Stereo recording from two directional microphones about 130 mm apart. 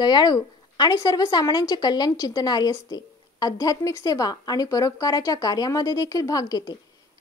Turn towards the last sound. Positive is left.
turn(degrees=30)  # may be behind; listen again after turning